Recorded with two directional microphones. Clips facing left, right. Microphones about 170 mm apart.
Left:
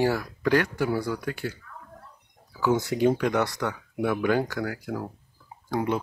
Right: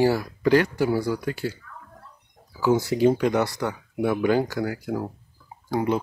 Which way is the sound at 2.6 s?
5° right (ahead or behind).